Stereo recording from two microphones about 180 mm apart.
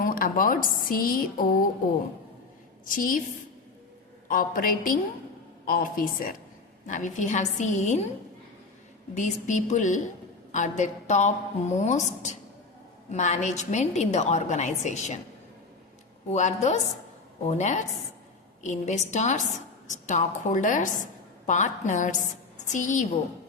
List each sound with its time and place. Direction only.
0.0 s a woman's voice: 50° left (ahead or behind)
2.8 s a woman's voice: 50° left (ahead or behind)
4.3 s a woman's voice: 50° left (ahead or behind)
9.1 s a woman's voice: 40° left (ahead or behind)
16.3 s a woman's voice: 40° left (ahead or behind)